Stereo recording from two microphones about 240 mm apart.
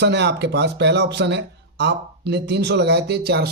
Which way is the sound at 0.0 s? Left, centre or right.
Right.